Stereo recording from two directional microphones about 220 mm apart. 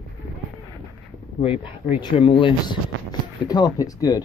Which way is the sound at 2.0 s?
25° left (ahead or behind).